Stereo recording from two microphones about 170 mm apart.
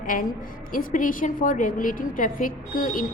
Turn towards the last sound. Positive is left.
turn(degrees=55)  # may be behind; listen again after turning